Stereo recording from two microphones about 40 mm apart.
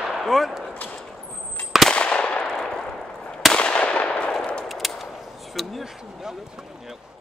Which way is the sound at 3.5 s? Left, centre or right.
Left.